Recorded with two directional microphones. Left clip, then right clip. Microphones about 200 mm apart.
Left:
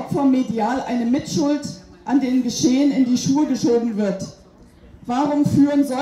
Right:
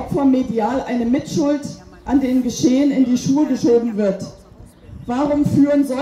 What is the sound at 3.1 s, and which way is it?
A woman's voice, 25° left (ahead or behind).